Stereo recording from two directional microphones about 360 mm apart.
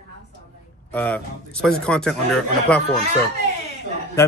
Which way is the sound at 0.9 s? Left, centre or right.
Centre.